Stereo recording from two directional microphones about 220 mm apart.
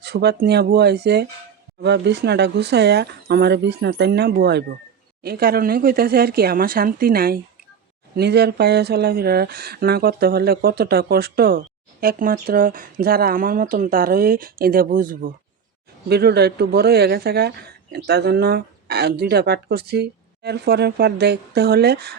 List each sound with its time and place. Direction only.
0.0 s speech: 45° right (ahead or behind)